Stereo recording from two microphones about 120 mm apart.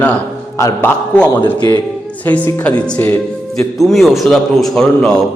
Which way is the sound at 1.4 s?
35° left (ahead or behind).